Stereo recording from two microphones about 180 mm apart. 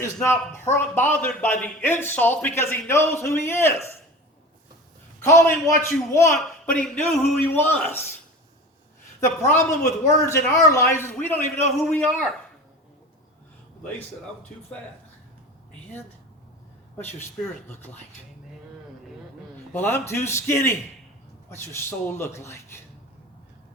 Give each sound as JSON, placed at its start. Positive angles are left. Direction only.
{"t": 0.0, "sound": "a man's voice", "side_deg": 15}
{"t": 5.2, "sound": "a man's voice", "side_deg": 15}
{"t": 9.5, "sound": "a man's voice", "side_deg": 15}
{"t": 17.4, "sound": "a man's voice", "side_deg": 10}
{"t": 19.7, "sound": "a man's voice", "side_deg": 10}